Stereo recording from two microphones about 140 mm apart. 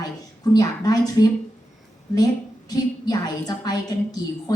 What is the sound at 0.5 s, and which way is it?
Speech, 25° left (ahead or behind).